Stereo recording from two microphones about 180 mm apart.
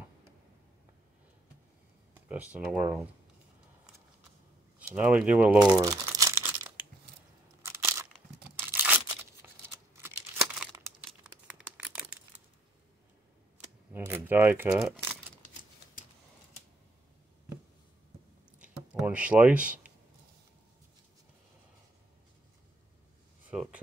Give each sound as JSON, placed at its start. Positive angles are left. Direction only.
{"t": 2.1, "sound": "speech", "side_deg": -10}
{"t": 4.7, "sound": "speech", "side_deg": -5}
{"t": 5.8, "sound": "crumpling", "side_deg": -20}
{"t": 7.6, "sound": "crunch", "side_deg": -15}
{"t": 8.5, "sound": "tearing", "side_deg": -10}
{"t": 9.9, "sound": "crumpling", "side_deg": -15}
{"t": 13.9, "sound": "a sound", "side_deg": -10}
{"t": 18.6, "sound": "a sound", "side_deg": -5}
{"t": 23.5, "sound": "a sound", "side_deg": -5}